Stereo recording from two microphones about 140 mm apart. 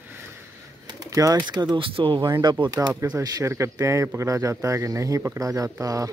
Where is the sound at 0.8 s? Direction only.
25° right (ahead or behind).